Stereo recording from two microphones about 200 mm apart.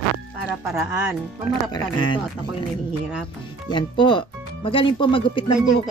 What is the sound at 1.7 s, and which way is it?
Speech, 20° left (ahead or behind).